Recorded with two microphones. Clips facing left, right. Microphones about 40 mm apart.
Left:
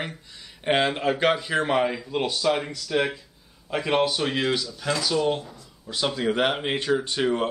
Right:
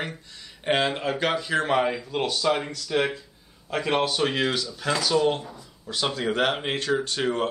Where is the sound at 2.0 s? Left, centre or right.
Centre.